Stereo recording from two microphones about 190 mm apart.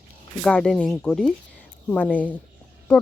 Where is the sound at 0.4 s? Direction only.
5° left (ahead or behind).